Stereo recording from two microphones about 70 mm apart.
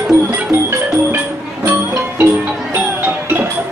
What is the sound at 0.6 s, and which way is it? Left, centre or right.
Music, right.